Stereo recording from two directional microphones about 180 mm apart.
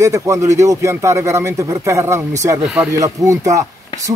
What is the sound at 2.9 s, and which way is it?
Speech, 20° right (ahead or behind).